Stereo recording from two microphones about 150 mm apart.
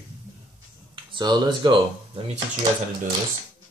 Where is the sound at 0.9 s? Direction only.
30° right (ahead or behind).